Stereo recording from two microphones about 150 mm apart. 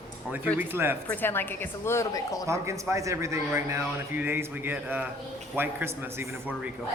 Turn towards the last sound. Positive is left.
turn(degrees=-15)  # may be behind; listen again after turning